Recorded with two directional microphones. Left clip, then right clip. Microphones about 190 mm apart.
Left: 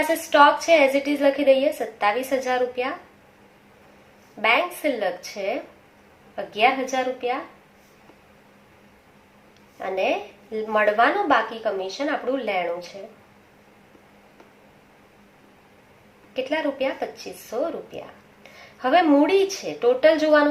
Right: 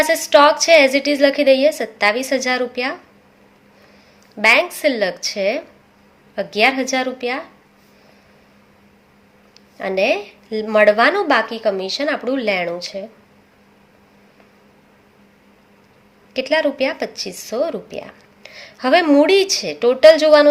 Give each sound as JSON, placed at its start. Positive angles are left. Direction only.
{"t": 0.1, "sound": "a woman's voice", "side_deg": -55}
{"t": 4.4, "sound": "a woman's voice", "side_deg": -55}
{"t": 9.7, "sound": "a woman's voice", "side_deg": -60}
{"t": 16.3, "sound": "a woman's voice", "side_deg": -55}